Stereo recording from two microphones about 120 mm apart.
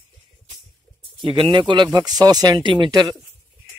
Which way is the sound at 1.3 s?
45° right (ahead or behind).